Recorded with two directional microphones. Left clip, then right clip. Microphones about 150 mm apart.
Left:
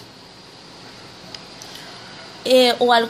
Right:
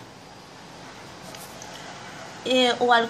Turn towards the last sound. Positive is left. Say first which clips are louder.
# left 5 dB
turn(degrees=35)  # may be behind; listen again after turning